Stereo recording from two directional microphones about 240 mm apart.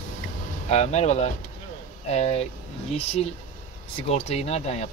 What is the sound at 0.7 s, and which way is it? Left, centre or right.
Speech, left.